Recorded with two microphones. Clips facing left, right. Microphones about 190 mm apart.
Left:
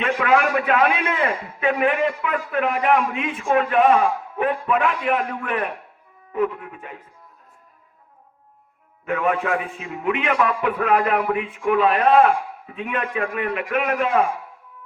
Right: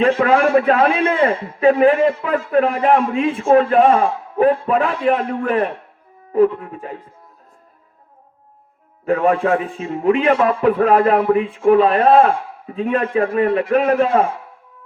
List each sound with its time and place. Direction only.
0.0 s a man's voice: 30° right (ahead or behind)
9.0 s a man's voice: 35° right (ahead or behind)